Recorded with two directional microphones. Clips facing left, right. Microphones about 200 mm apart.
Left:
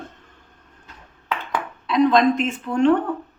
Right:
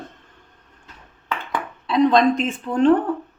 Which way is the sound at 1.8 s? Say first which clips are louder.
Even; 30° right (ahead or behind).